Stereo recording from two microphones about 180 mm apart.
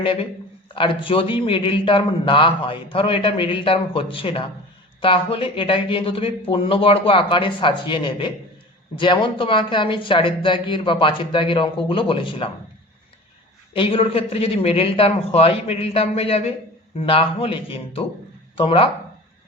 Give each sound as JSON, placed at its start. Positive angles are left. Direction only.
{"t": 0.0, "sound": "a man's voice", "side_deg": 30}
{"t": 13.7, "sound": "a man's voice", "side_deg": 30}